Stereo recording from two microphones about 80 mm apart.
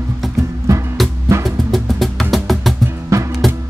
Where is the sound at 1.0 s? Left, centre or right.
Centre.